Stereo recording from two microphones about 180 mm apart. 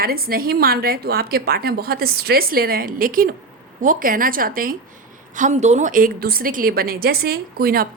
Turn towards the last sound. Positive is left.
turn(degrees=-55)  # may be behind; listen again after turning